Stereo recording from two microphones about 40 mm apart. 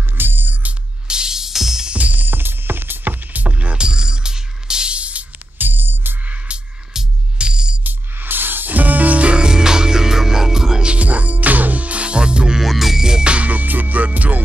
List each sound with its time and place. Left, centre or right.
0.2 s music: right
1.0 s music: centre
2.0 s music: right
3.4 s music: right; by 4.9 s centre
4.9 s music: right
5.6 s music: right
7.3 s music: right
7.8 s music: right
9.3 s music: centre
10.9 s music: right
12.5 s music: centre
13.0 s music: centre
13.3 s music: right